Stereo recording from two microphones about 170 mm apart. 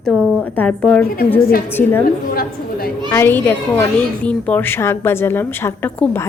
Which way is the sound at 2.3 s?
60° left (ahead or behind).